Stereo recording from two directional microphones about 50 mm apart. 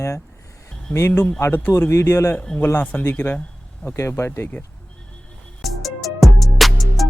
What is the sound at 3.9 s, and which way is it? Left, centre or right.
Speech, left.